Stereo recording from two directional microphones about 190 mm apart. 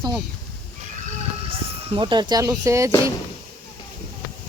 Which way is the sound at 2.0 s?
25° right (ahead or behind).